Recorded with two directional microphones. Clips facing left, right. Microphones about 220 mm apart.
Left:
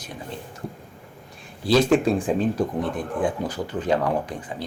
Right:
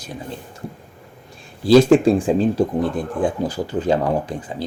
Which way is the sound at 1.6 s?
30° right (ahead or behind).